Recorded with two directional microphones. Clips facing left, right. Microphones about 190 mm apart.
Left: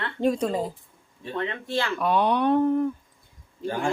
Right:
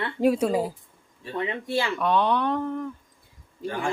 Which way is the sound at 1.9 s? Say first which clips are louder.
Left 1 dB; 10° left (ahead or behind).